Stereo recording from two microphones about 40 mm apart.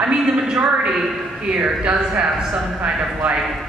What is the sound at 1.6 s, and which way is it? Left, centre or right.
Speech, right.